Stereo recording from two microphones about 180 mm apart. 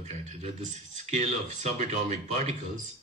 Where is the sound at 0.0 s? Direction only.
40° right (ahead or behind).